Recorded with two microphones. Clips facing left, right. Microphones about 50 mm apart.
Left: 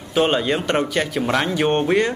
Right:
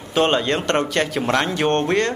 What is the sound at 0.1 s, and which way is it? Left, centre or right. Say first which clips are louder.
A man's voice: even; centre.